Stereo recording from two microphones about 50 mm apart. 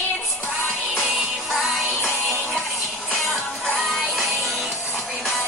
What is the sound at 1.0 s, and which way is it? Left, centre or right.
Music, centre.